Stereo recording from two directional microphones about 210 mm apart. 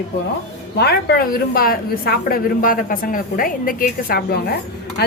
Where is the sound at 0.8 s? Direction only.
50° left (ahead or behind).